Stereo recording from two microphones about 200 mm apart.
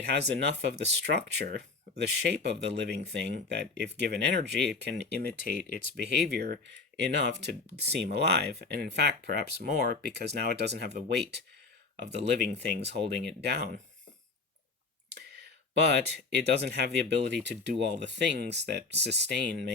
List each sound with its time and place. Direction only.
0.0 s speech: 60° right (ahead or behind)
5.5 s speech: 45° left (ahead or behind)
6.0 s speech: 55° right (ahead or behind)
15.1 s clicking: 60° right (ahead or behind)
15.9 s speech: 60° right (ahead or behind)